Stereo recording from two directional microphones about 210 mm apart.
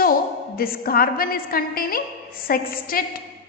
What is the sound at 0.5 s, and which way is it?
A woman's voice, 45° left (ahead or behind).